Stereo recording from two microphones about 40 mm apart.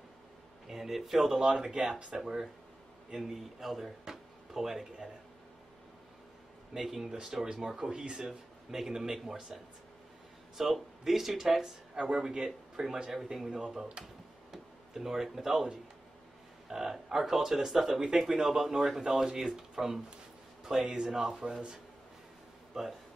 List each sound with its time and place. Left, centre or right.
0.7 s speech: centre
1.7 s speech: right
2.1 s speech: centre
4.0 s a sound: centre
6.7 s speech: centre; by 8.2 s right
8.2 s speech: centre
10.6 s speech: centre
12.0 s speech: centre
13.5 s speech: right
13.7 s speech: centre
14.5 s speech: centre
16.6 s speech: centre
22.7 s speech: centre